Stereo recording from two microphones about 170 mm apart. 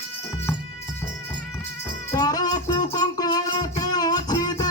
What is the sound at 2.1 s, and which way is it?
Music, 20° left (ahead or behind).